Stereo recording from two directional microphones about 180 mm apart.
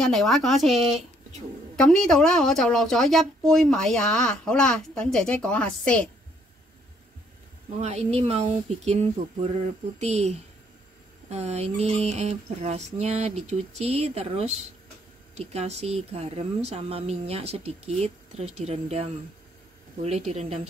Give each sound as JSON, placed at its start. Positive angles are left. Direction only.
{"t": 0.0, "sound": "a woman's voice", "side_deg": 0}
{"t": 7.8, "sound": "speech", "side_deg": -35}